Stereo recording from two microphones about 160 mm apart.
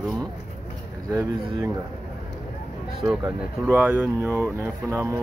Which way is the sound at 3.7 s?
10° right (ahead or behind).